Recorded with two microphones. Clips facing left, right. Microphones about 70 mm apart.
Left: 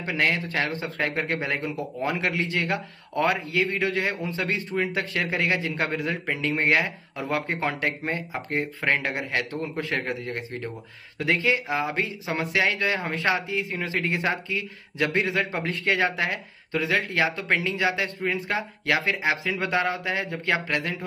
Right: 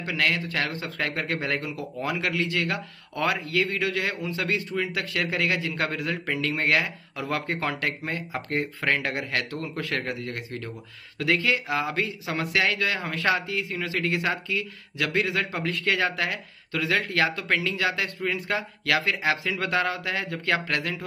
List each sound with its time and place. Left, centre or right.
0.0 s speech: left